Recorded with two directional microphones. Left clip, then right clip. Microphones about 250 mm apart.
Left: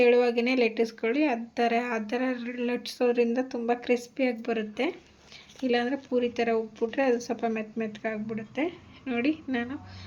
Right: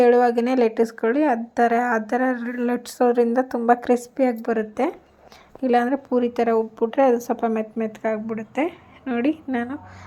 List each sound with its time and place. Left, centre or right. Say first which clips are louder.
0.0 s speech: right 6 dB; right